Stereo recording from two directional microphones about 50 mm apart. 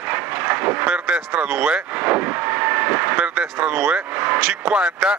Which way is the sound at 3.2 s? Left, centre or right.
Right.